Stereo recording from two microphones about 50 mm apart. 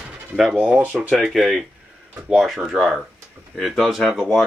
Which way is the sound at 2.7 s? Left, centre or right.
Centre.